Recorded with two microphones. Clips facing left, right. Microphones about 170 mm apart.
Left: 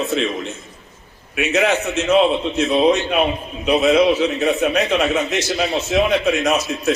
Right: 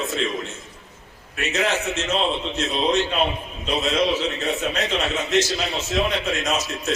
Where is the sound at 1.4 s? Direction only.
65° left (ahead or behind).